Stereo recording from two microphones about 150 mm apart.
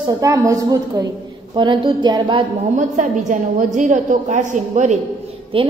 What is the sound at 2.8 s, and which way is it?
A woman's voice, 55° right (ahead or behind).